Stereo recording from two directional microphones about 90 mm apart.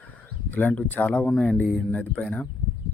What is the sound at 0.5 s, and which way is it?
Speech, 20° left (ahead or behind).